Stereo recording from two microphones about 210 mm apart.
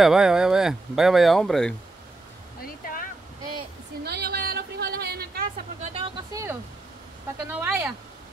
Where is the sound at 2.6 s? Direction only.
40° left (ahead or behind).